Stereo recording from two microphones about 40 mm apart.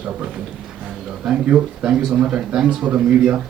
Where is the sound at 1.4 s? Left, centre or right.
Right.